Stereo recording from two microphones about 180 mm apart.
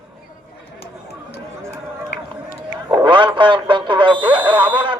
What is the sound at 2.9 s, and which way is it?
Radio, 25° right (ahead or behind).